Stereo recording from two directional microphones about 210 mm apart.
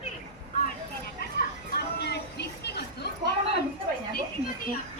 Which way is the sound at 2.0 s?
50° left (ahead or behind).